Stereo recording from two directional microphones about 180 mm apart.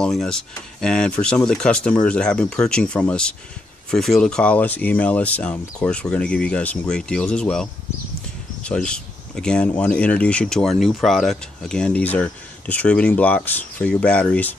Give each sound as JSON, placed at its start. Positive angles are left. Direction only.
{"t": 0.0, "sound": "speech", "side_deg": 0}
{"t": 8.6, "sound": "speech", "side_deg": 5}